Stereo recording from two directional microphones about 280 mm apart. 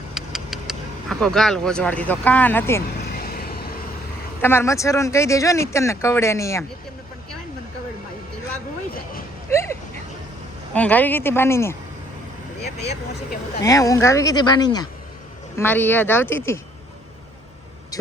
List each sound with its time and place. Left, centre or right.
0.1 s vehicle: centre
3.1 s vehicle: left
4.4 s a man's voice: centre
9.5 s a sound: centre
10.8 s a man's voice: centre
13.6 s a man's voice: centre
17.9 s vehicle: centre